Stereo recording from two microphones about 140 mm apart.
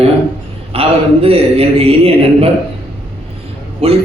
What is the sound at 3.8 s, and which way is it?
Speech, 45° right (ahead or behind).